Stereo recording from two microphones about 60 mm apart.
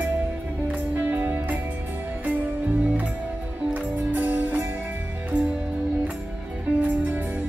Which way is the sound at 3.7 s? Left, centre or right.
Right.